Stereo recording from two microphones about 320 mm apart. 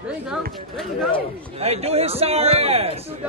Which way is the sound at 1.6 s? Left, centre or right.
Centre.